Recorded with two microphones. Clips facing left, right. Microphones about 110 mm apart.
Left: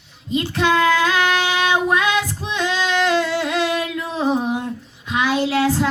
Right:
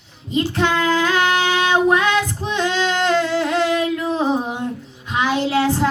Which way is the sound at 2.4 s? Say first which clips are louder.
Right 2 dB; 25° right (ahead or behind).